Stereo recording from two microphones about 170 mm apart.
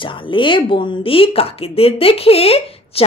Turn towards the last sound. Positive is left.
turn(degrees=35)  # may be behind; listen again after turning